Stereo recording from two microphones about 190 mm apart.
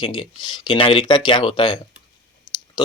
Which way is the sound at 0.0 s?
25° left (ahead or behind).